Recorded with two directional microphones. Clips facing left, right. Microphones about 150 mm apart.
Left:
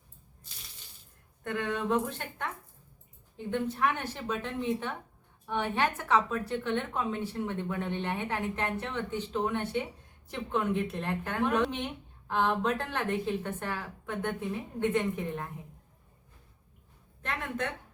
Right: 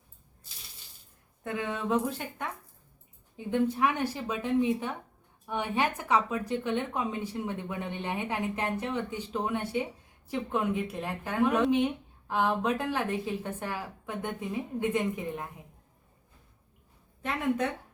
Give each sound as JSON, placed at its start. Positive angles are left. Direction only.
{"t": 1.5, "sound": "a woman's voice", "side_deg": -5}